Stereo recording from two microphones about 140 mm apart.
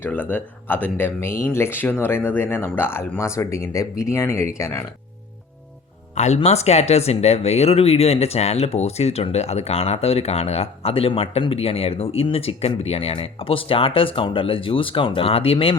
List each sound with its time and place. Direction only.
0.0 s speech: 10° left (ahead or behind)
6.1 s speech: 50° left (ahead or behind)